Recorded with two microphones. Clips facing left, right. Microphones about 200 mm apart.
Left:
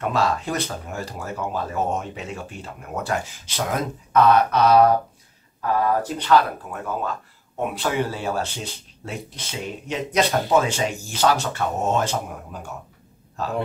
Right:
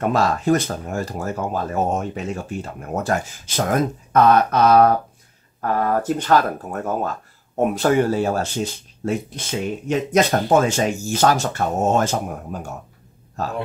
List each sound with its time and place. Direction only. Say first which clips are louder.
0.0 s speech: right 4 dB; 45° right (ahead or behind)